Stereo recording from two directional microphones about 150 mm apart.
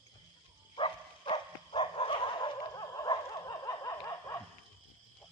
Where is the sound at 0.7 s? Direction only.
35° left (ahead or behind).